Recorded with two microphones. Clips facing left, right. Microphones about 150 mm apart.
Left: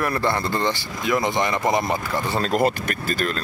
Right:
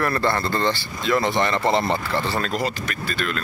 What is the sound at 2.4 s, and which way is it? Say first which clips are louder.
Speech: left 5 dB; 50° left (ahead or behind).